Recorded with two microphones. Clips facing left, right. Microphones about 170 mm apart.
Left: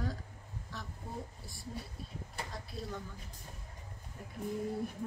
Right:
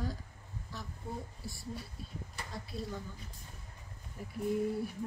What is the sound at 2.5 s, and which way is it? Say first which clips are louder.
Speech: right 2 dB; centre (ahead or behind).